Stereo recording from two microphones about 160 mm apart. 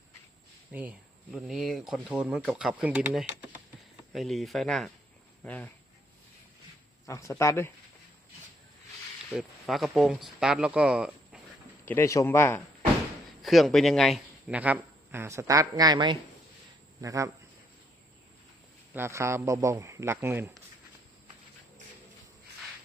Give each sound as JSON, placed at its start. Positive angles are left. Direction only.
{"t": 0.7, "sound": "speech", "side_deg": -10}
{"t": 7.1, "sound": "speech", "side_deg": 20}
{"t": 9.3, "sound": "speech", "side_deg": 0}
{"t": 11.9, "sound": "a man's voice", "side_deg": 15}
{"t": 13.4, "sound": "speech", "side_deg": 0}
{"t": 18.9, "sound": "speech", "side_deg": -15}